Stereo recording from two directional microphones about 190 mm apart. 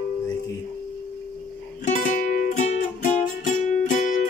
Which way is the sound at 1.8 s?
45° left (ahead or behind).